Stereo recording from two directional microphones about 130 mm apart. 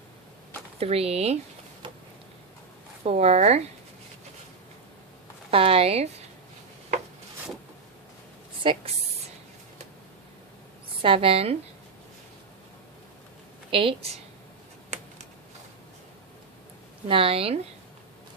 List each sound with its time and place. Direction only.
0.8 s speech: 50° right (ahead or behind)
3.0 s speech: 55° right (ahead or behind)
5.5 s speech: 45° right (ahead or behind)
8.6 s speech: 40° right (ahead or behind)
11.0 s speech: 45° right (ahead or behind)
13.7 s speech: 45° right (ahead or behind)
17.1 s speech: 45° right (ahead or behind)